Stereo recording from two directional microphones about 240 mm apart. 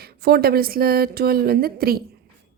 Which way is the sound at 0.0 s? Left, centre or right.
Right.